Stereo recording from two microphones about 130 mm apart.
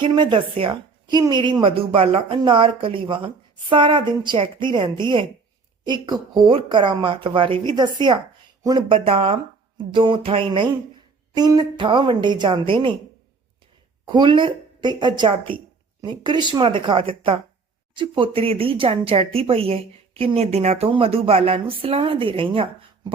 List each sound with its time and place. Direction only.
0.0 s a woman's voice: 35° right (ahead or behind)
9.0 s speech: 50° right (ahead or behind)
11.3 s a woman's voice: 30° right (ahead or behind)
14.0 s a woman's voice: 35° right (ahead or behind)